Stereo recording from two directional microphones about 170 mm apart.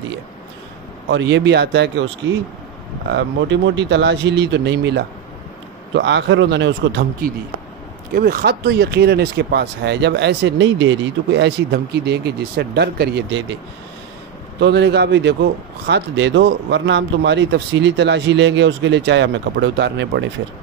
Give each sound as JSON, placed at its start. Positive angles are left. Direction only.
{"t": 1.1, "sound": "speech", "side_deg": -90}
{"t": 14.6, "sound": "a man's voice", "side_deg": -80}